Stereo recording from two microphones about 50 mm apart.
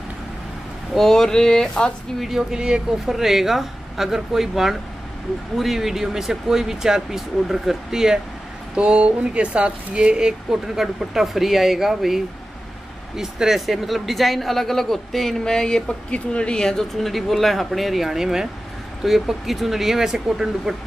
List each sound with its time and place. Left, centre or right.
0.9 s speech: centre
2.1 s speech: centre
8.7 s speech: right
10.8 s speech: centre